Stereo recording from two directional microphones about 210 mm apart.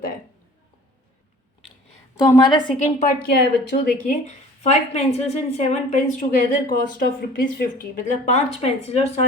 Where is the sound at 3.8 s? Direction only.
35° left (ahead or behind).